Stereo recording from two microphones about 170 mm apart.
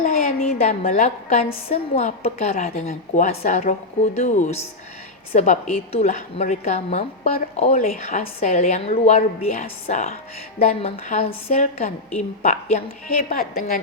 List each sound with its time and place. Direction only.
0.0 s a woman's voice: 40° left (ahead or behind)
13.5 s a woman's voice: 55° left (ahead or behind)